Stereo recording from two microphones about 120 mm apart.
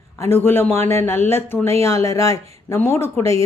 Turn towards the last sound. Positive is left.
turn(degrees=20)  # may be behind; listen again after turning